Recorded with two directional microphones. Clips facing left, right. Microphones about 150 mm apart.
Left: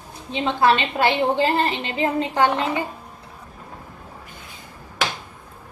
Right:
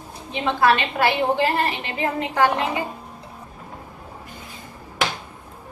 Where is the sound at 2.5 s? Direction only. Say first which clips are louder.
Left 1 dB; 15° right (ahead or behind).